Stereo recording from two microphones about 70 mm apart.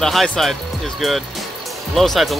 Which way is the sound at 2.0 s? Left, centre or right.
Centre.